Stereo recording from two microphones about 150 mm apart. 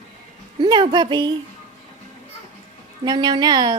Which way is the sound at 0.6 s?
30° right (ahead or behind).